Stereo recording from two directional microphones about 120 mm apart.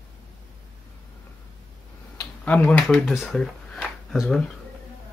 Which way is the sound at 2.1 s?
10° left (ahead or behind).